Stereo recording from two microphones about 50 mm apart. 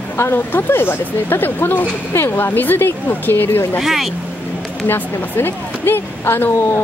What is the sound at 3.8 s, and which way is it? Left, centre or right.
Speech, centre.